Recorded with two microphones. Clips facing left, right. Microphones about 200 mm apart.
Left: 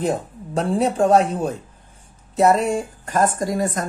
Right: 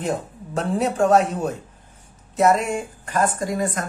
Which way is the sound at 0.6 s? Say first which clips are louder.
Left 2 dB; 30° left (ahead or behind).